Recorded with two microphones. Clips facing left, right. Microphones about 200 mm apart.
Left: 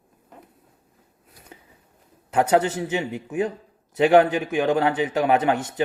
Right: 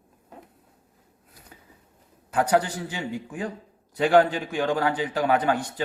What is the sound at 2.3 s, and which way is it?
A man's voice, 25° left (ahead or behind).